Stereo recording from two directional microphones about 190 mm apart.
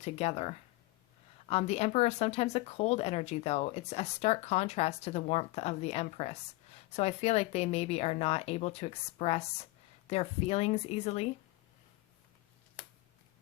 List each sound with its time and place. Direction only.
0.0 s speech: 35° left (ahead or behind)